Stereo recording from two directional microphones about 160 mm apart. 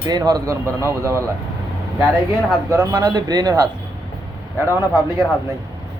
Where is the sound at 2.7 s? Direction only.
20° right (ahead or behind).